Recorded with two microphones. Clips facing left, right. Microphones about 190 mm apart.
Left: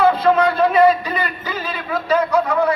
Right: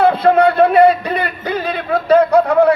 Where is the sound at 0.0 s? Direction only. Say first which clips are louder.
Right 3 dB; 60° right (ahead or behind).